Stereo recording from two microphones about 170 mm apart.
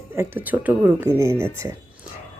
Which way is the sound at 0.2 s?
10° right (ahead or behind).